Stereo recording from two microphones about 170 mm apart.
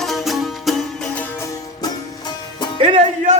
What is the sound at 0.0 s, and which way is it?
Music, centre (ahead or behind).